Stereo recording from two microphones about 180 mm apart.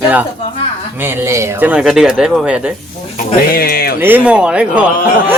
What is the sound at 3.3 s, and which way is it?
Speech, 55° left (ahead or behind).